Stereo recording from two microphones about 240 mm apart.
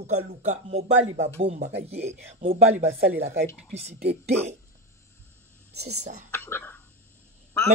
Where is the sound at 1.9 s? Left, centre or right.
Right.